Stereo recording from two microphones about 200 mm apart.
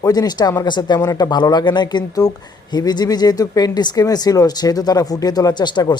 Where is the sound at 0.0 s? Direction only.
20° left (ahead or behind).